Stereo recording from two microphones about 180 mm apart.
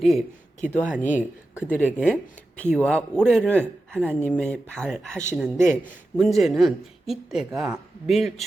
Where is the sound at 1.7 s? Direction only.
5° left (ahead or behind).